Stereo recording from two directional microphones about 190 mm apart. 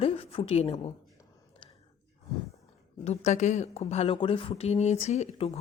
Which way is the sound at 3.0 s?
35° left (ahead or behind).